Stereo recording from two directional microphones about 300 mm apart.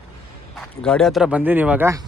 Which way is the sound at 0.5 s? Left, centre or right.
Centre.